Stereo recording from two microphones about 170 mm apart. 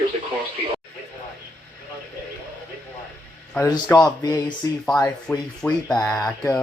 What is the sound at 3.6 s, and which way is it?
Speech, 25° left (ahead or behind).